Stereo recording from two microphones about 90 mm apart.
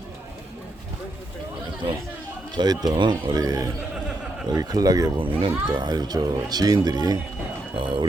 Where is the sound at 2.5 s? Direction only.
50° right (ahead or behind).